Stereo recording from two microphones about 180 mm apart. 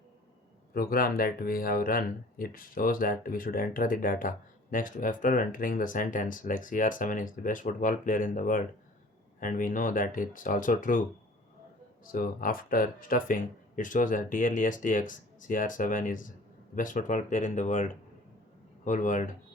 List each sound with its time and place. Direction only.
0.7 s speech: 55° left (ahead or behind)
12.0 s speech: 50° left (ahead or behind)